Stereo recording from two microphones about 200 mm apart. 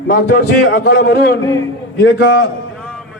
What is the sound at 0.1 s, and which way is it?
A man's voice, 55° left (ahead or behind).